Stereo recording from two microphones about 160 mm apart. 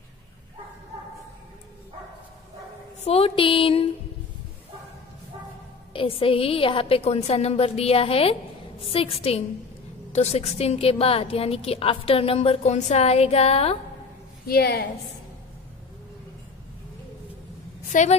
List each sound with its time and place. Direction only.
3.1 s a woman's voice: 40° left (ahead or behind)
5.9 s a woman's voice: 35° left (ahead or behind)
14.4 s a woman's voice: 75° left (ahead or behind)
17.9 s a woman's voice: 50° left (ahead or behind)